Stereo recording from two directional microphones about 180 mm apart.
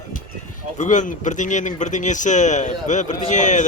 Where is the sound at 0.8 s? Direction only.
45° left (ahead or behind).